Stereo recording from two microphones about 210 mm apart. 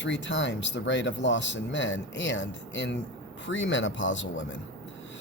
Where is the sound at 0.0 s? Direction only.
60° left (ahead or behind).